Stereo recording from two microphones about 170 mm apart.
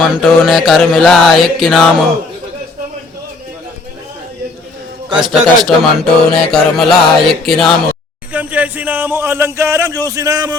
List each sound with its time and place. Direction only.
0.0 s speech: centre (ahead or behind)
5.0 s speech: 5° right (ahead or behind)
8.3 s a man's voice: 10° right (ahead or behind)